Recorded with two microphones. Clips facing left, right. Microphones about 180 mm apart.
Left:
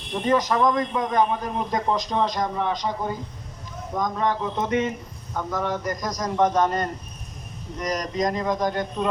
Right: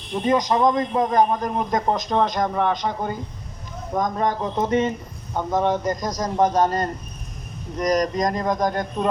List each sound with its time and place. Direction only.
0.3 s a man's voice: 15° right (ahead or behind); by 3.2 s 60° right (ahead or behind)
3.9 s a man's voice: 50° right (ahead or behind)
5.4 s a man's voice: 25° right (ahead or behind); by 9.0 s 45° right (ahead or behind)